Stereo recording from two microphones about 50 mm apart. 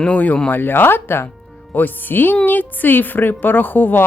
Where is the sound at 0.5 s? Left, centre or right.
Left.